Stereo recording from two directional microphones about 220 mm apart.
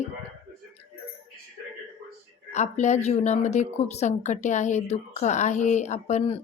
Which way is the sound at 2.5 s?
30° left (ahead or behind).